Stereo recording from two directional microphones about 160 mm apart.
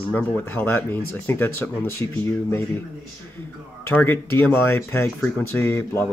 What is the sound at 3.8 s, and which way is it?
Speech, 15° left (ahead or behind).